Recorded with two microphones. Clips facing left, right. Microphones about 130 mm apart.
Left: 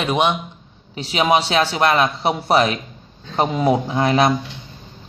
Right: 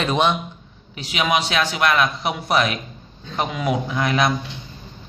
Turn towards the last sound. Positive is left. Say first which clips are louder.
# left 4 dB
turn(degrees=30)  # may be behind; listen again after turning